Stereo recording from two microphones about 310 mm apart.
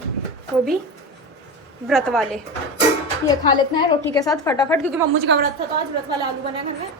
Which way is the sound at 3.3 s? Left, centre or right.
Centre.